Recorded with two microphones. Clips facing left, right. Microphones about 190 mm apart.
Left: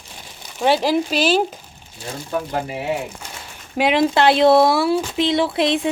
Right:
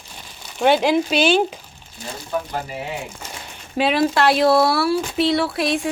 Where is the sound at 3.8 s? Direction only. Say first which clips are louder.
Left 2 dB; 20° left (ahead or behind).